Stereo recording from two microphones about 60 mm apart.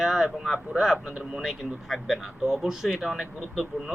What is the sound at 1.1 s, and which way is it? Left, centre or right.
Speech, centre.